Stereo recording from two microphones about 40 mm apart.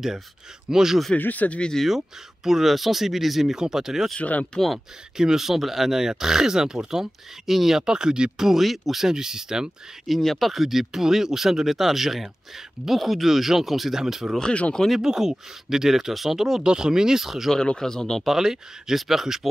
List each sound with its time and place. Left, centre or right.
0.7 s speech: centre
1.2 s speech: left
1.9 s speech: centre
4.2 s speech: left
5.1 s speech: centre
10.0 s speech: centre
17.6 s speech: centre
18.2 s speech: centre